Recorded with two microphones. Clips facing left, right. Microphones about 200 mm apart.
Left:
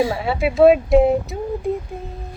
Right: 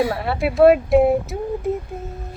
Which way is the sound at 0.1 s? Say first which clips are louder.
Left 1 dB; centre (ahead or behind).